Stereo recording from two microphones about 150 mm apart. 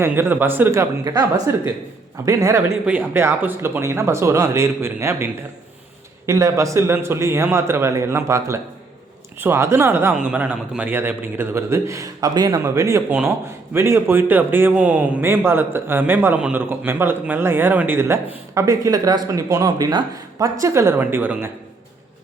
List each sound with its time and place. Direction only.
0.0 s a man's voice: 15° right (ahead or behind)